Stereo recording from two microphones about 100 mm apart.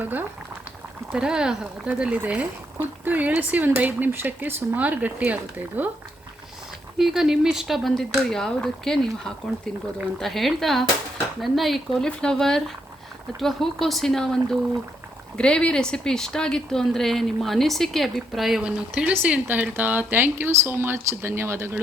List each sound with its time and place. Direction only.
0.0 s speech: 20° right (ahead or behind)
1.1 s speech: 10° right (ahead or behind)
7.0 s a woman's voice: 5° right (ahead or behind); by 21.8 s 25° right (ahead or behind)